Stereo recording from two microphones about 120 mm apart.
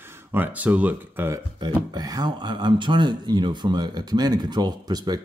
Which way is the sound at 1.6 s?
35° right (ahead or behind).